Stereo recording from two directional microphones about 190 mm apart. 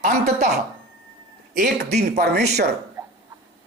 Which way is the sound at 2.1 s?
60° right (ahead or behind).